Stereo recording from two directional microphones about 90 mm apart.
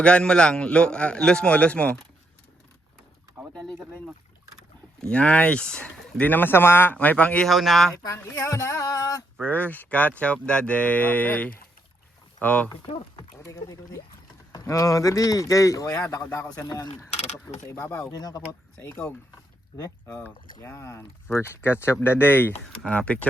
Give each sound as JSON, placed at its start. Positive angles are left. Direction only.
{"t": 0.0, "sound": "speech", "side_deg": 10}
{"t": 5.1, "sound": "speech", "side_deg": 15}
{"t": 7.4, "sound": "speech", "side_deg": 0}
{"t": 8.1, "sound": "speech", "side_deg": 35}
{"t": 9.4, "sound": "speech", "side_deg": 20}
{"t": 13.1, "sound": "a sound", "side_deg": 40}
{"t": 14.6, "sound": "speech", "side_deg": 40}
{"t": 17.7, "sound": "speech", "side_deg": 30}
{"t": 18.1, "sound": "speech", "side_deg": 45}
{"t": 18.8, "sound": "speech", "side_deg": 25}
{"t": 19.7, "sound": "speech", "side_deg": 40}
{"t": 20.2, "sound": "speech", "side_deg": 25}